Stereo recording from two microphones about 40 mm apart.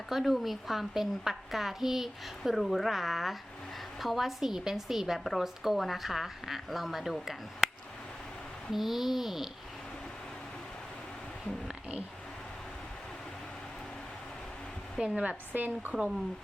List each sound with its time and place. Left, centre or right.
0.1 s a woman's voice: centre
8.7 s a woman's voice: centre
15.1 s a woman's voice: right
15.5 s speech: right